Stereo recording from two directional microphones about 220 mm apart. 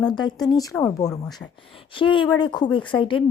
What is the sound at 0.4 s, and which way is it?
A woman's voice, 15° left (ahead or behind).